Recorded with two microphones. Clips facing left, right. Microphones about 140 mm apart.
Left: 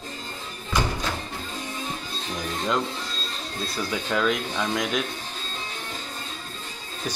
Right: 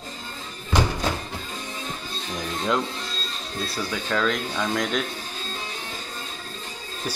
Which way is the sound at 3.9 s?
10° left (ahead or behind).